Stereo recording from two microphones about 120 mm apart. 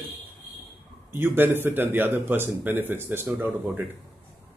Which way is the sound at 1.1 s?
20° right (ahead or behind).